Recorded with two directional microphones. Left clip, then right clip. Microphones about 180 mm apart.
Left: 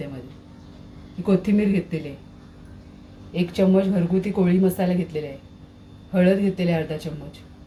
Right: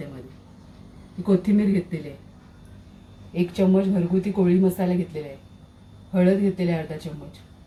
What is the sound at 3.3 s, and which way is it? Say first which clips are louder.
Speech: left 2 dB; 20° left (ahead or behind).